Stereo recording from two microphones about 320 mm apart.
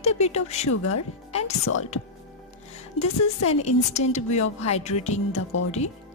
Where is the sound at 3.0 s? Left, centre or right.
Left.